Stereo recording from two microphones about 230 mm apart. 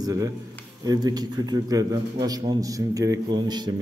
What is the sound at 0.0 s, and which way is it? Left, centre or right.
A man's voice, centre.